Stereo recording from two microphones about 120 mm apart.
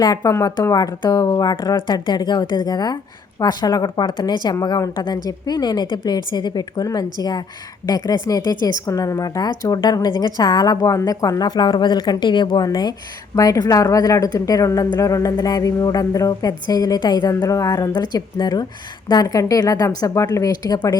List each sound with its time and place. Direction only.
0.2 s speech: 25° left (ahead or behind)